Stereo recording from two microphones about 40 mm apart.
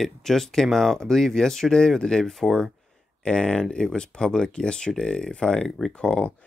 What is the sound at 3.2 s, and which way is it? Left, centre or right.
Speech, left.